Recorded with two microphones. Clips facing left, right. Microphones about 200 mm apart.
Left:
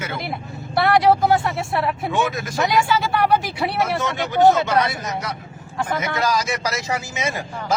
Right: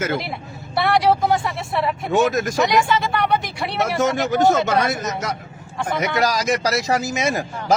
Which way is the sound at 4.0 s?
45° right (ahead or behind).